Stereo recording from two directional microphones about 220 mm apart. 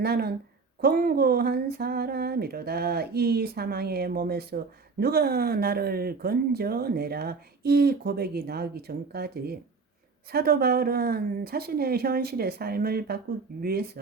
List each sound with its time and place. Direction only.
0.0 s speech: 45° right (ahead or behind)